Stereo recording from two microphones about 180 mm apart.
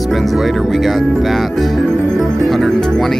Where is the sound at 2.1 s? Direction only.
5° left (ahead or behind).